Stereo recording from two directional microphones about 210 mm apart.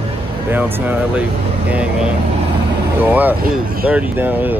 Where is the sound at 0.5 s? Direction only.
10° right (ahead or behind).